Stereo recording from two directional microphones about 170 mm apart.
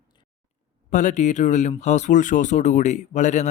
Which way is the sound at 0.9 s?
45° left (ahead or behind).